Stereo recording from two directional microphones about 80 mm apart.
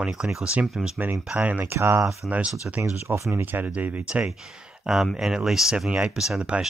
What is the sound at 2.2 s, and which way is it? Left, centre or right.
Speech, centre.